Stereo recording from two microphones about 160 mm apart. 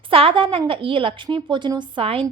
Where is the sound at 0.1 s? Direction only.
35° right (ahead or behind).